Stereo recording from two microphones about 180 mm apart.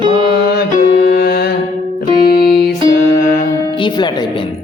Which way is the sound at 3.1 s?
50° left (ahead or behind).